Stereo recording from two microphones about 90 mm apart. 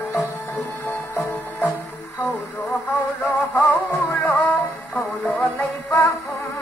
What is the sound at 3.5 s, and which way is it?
Music, 20° left (ahead or behind).